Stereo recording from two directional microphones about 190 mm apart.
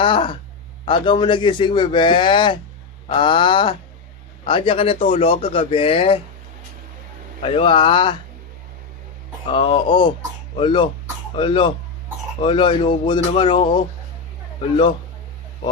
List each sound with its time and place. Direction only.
0.0 s a sound: 25° left (ahead or behind)
0.9 s speech: 25° left (ahead or behind)
7.4 s speech: 30° left (ahead or behind)
9.5 s speech: 30° left (ahead or behind)